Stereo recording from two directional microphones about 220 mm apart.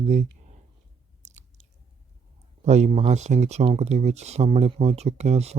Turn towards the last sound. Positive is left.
turn(degrees=-30)  # may be behind; listen again after turning